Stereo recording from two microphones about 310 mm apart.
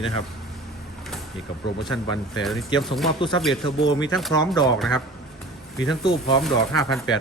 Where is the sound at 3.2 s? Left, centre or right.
Centre.